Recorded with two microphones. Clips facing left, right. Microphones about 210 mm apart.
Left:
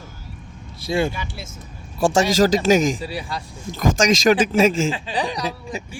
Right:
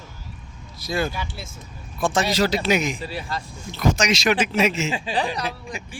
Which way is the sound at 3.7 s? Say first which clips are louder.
Left 7 dB; 45° left (ahead or behind).